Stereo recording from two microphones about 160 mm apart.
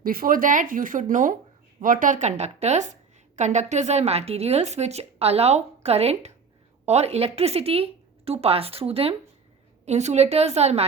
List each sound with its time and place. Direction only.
0.0 s a woman's voice: 65° right (ahead or behind); by 10.8 s 40° right (ahead or behind)